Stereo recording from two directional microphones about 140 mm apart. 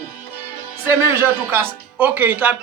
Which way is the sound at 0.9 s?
15° right (ahead or behind).